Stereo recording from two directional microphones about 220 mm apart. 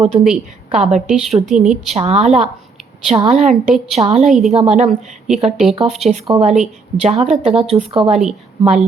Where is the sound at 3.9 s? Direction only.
30° right (ahead or behind).